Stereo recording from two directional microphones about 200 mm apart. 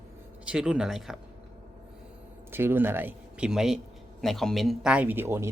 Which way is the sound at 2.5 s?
10° right (ahead or behind).